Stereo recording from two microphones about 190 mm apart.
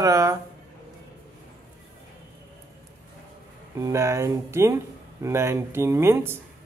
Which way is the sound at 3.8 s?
15° right (ahead or behind).